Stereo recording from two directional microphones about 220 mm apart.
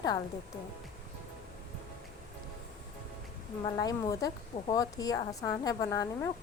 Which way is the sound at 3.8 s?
15° left (ahead or behind).